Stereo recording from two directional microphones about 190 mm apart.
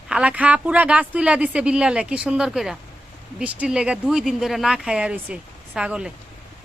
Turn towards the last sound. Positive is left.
turn(degrees=-5)  # may be behind; listen again after turning